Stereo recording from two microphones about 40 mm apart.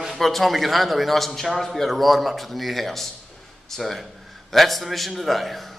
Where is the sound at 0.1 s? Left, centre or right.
Centre.